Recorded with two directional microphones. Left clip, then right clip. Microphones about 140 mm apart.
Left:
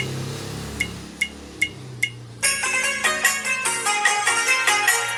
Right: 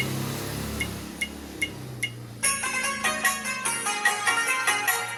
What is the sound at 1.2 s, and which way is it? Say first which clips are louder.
Music: left 6 dB; 45° left (ahead or behind).